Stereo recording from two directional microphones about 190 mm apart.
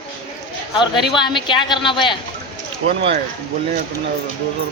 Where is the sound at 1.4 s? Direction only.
25° left (ahead or behind).